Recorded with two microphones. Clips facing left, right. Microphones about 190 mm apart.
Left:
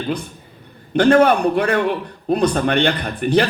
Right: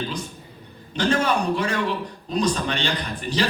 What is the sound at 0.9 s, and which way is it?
A man's voice, 60° left (ahead or behind).